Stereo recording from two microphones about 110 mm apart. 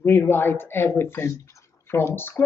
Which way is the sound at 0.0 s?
20° left (ahead or behind).